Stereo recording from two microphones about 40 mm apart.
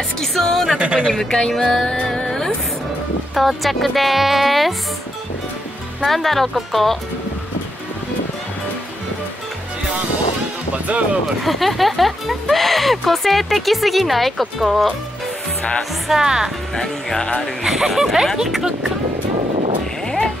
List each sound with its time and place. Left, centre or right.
0.2 s a woman's voice: centre
0.7 s speech: right
1.0 s speech: centre
1.5 s a woman's voice: centre
2.1 s speech: left
3.3 s speech: centre
6.0 s speech: centre
10.9 s speech: right
11.4 s speech: centre
16.1 s speech: centre
16.7 s a woman's voice: centre
17.6 s speech: centre
20.1 s music: centre